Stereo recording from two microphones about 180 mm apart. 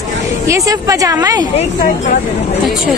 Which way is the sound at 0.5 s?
20° right (ahead or behind).